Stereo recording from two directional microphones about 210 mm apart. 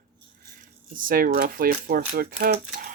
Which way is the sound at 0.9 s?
40° right (ahead or behind).